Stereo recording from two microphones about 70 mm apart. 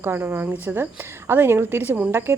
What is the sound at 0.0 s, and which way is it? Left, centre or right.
Speech, right.